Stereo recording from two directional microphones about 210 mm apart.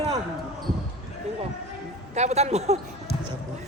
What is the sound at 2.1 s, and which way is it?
Speech, 30° right (ahead or behind).